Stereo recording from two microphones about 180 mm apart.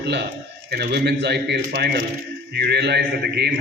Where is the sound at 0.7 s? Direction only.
65° right (ahead or behind).